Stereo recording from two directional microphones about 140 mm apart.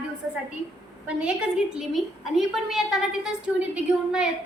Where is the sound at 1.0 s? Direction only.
5° right (ahead or behind).